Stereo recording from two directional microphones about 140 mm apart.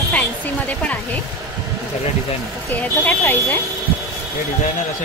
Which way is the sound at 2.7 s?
15° left (ahead or behind).